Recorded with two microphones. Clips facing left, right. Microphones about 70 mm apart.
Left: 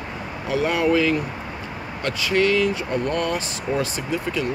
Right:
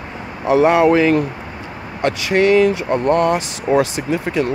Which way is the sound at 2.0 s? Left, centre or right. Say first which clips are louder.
Right 5 dB; right.